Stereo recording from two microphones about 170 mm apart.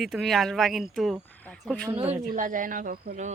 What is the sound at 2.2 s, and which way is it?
Speech, 50° right (ahead or behind).